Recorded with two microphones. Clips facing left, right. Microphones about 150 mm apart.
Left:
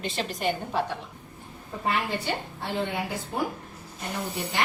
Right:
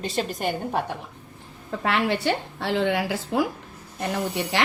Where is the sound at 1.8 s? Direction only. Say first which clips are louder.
Right 4 dB; 90° right.